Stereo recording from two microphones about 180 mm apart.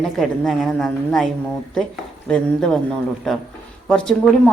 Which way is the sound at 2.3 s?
5° left (ahead or behind).